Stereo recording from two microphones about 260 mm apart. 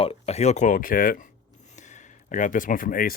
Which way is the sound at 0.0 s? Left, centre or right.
Left.